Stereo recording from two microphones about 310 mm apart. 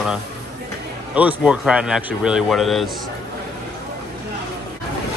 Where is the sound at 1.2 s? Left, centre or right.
Centre.